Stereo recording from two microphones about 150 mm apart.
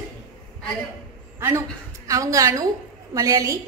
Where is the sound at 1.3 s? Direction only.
20° right (ahead or behind).